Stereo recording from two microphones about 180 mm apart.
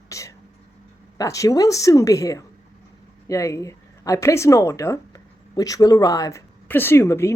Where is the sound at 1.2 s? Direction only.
15° left (ahead or behind).